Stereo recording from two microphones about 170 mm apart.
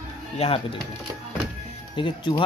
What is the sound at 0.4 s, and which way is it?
Speech, 35° left (ahead or behind).